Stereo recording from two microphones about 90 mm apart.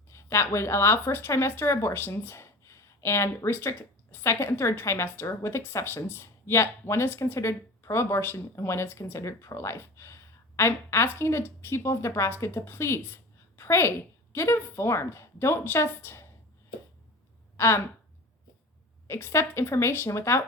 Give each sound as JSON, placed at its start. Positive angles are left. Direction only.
{"t": 0.1, "sound": "a woman's voice", "side_deg": 30}
{"t": 17.6, "sound": "speech", "side_deg": 25}
{"t": 19.0, "sound": "speech", "side_deg": 25}